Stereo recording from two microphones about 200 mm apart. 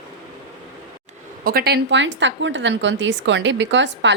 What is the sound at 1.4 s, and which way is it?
A woman's voice, 45° right (ahead or behind).